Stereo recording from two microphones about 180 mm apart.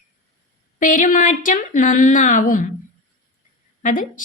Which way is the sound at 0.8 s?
45° left (ahead or behind).